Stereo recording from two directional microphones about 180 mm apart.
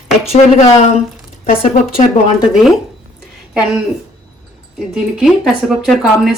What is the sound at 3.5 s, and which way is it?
Speech, 5° right (ahead or behind).